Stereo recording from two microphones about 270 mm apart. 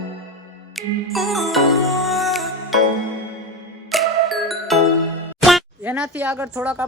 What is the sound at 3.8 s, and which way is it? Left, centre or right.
Music, centre.